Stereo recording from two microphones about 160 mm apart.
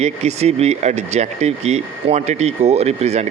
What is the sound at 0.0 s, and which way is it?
Speech, 45° right (ahead or behind).